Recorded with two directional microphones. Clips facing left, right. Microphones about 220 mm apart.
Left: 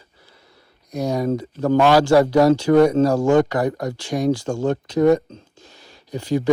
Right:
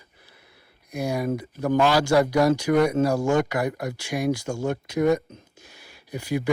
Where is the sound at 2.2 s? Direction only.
35° left (ahead or behind).